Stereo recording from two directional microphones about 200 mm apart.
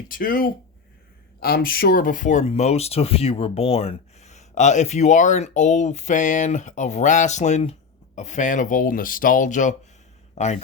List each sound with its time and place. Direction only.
0.1 s speech: 45° left (ahead or behind)